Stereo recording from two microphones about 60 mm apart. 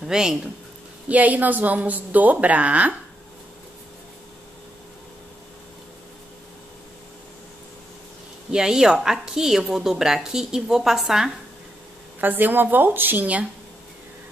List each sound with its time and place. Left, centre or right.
0.0 s speech: centre
1.0 s a woman's voice: right
8.5 s a woman's voice: centre
12.2 s a woman's voice: right